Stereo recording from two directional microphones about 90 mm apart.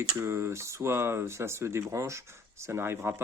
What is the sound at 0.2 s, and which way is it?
Speech, 30° right (ahead or behind).